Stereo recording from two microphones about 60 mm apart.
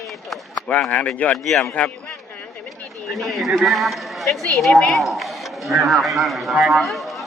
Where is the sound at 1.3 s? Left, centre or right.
Centre.